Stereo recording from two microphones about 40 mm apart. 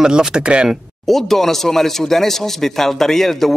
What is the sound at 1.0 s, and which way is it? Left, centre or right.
Speech, centre.